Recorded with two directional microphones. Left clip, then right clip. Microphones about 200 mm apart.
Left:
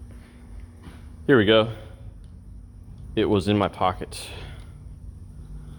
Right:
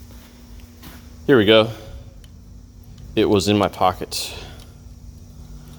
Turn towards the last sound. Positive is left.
turn(degrees=-20)  # may be behind; listen again after turning